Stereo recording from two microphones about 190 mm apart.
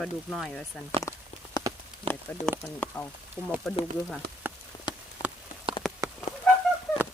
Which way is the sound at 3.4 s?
10° right (ahead or behind).